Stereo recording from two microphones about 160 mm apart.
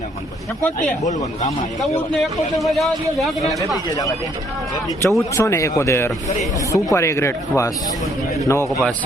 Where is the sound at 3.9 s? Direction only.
20° left (ahead or behind).